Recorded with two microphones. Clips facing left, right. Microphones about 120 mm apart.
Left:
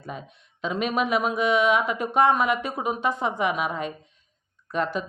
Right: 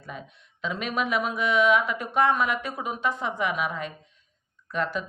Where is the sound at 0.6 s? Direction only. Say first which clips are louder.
Left 4 dB; 20° left (ahead or behind).